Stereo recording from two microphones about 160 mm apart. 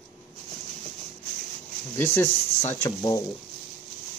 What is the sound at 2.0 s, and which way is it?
Speech, 15° left (ahead or behind).